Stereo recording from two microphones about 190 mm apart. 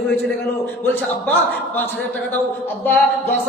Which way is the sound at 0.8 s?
10° left (ahead or behind).